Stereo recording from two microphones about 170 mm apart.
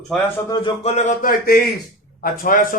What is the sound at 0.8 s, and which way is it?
Speech, 40° left (ahead or behind).